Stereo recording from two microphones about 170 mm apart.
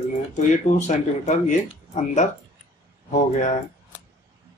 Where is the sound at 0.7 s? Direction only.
45° left (ahead or behind).